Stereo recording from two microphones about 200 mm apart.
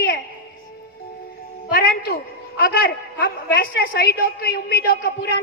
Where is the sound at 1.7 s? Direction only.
50° left (ahead or behind).